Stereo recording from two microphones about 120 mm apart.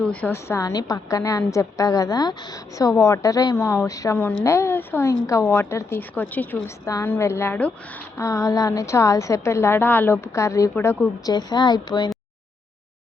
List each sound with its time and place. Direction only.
0.0 s a woman's voice: 10° left (ahead or behind)
6.8 s a woman's voice: 30° left (ahead or behind)
8.2 s a woman's voice: 30° left (ahead or behind)